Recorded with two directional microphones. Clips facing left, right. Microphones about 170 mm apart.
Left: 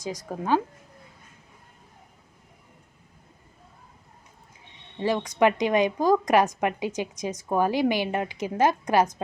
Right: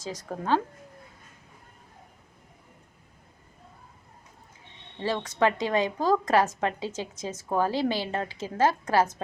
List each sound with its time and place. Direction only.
0.0 s a woman's voice: 10° left (ahead or behind)
4.9 s a woman's voice: 15° left (ahead or behind)